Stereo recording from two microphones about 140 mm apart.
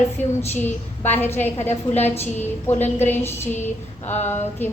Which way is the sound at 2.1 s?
50° left (ahead or behind).